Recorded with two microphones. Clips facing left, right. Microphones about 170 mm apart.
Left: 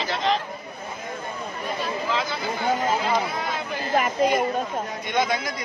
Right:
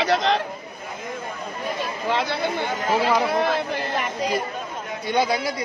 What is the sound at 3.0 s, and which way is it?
Speech, 85° right.